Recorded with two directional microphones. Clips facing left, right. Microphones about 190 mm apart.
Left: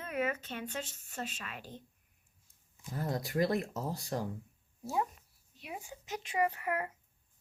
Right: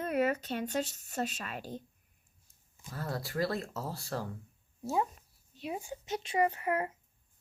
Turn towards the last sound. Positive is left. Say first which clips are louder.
# right 3 dB
turn(degrees=-25)  # may be behind; listen again after turning